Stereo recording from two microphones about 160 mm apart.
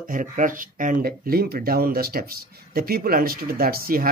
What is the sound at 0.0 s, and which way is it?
Speech, 55° right (ahead or behind).